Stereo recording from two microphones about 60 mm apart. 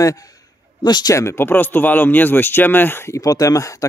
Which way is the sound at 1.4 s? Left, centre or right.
Left.